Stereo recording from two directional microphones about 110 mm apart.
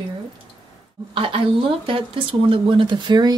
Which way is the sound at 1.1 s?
55° right (ahead or behind).